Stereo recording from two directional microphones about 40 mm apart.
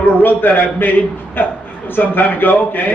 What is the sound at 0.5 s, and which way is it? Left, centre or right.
A man's voice, left.